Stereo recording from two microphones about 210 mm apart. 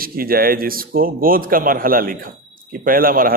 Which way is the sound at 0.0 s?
45° right (ahead or behind).